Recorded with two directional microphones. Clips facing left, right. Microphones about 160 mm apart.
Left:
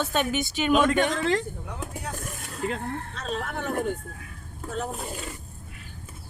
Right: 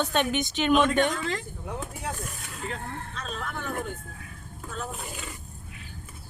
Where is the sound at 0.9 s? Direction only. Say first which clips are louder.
Left 2 dB; 70° left (ahead or behind).